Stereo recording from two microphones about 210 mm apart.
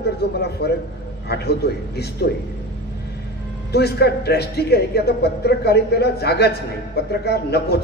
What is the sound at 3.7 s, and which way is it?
A man's voice, 50° left (ahead or behind).